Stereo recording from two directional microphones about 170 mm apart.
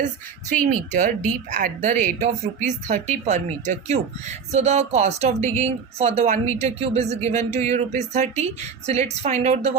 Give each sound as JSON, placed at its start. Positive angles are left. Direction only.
{"t": 0.5, "sound": "a woman's voice", "side_deg": -50}